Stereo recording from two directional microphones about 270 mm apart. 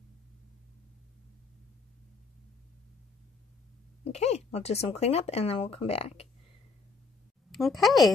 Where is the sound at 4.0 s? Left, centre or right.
Left.